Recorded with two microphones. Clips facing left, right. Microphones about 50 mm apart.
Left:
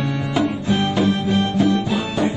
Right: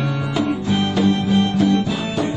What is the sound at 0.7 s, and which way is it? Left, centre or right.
Music, left.